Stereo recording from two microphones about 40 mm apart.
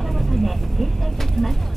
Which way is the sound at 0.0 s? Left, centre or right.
Centre.